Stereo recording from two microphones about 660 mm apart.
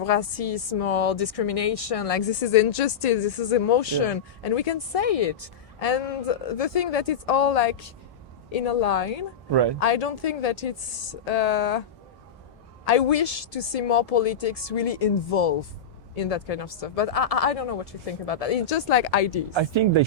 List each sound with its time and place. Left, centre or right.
0.0 s a woman's voice: left
9.5 s speech: right
9.8 s speech: left
12.8 s a woman's voice: left
19.5 s speech: right